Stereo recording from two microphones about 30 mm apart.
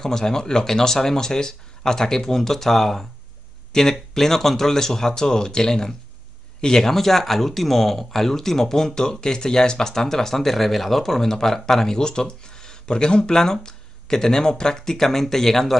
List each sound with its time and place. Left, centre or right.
0.0 s speech: centre